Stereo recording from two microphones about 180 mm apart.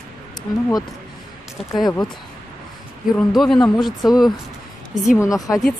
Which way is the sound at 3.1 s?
Centre (ahead or behind).